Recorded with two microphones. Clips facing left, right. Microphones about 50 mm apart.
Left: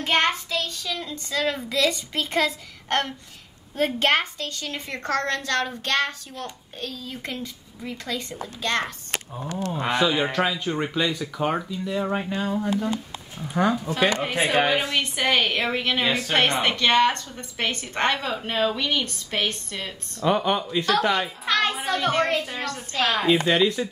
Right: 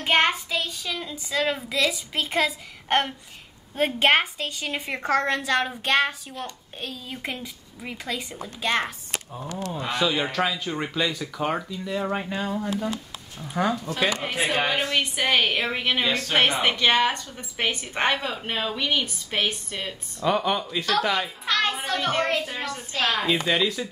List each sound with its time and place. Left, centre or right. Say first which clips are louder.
0.0 s a woman's voice: right 1 dB; centre
9.9 s a child's voice: left 2 dB; centre
16.1 s speech: left 1 dB; centre
16.3 s a woman's voice: right 1 dB; centre
20.2 s a child's voice: left 1 dB; centre